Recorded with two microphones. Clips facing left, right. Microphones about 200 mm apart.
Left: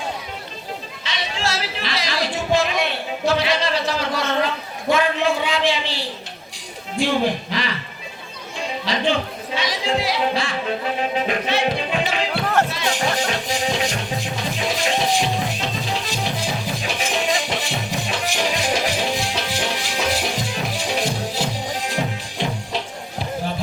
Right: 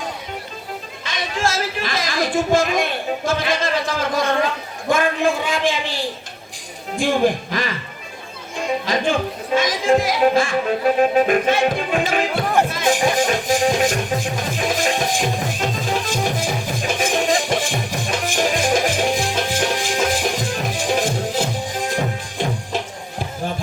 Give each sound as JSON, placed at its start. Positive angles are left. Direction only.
{"t": 1.0, "sound": "speech", "side_deg": -50}
{"t": 4.9, "sound": "music", "side_deg": -50}
{"t": 8.9, "sound": "music", "side_deg": -50}
{"t": 12.6, "sound": "speech", "side_deg": -50}
{"t": 13.1, "sound": "music", "side_deg": -50}